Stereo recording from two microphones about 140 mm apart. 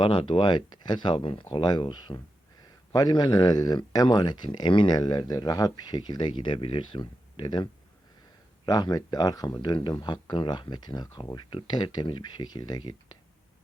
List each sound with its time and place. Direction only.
0.0 s speech: 35° left (ahead or behind)